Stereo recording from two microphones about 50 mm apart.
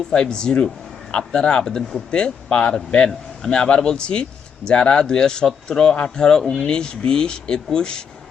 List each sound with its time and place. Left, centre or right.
0.1 s speech: centre
3.1 s a man's voice: centre